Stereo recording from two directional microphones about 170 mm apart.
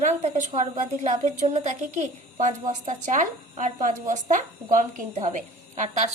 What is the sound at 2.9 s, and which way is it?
A woman's voice, 45° right (ahead or behind).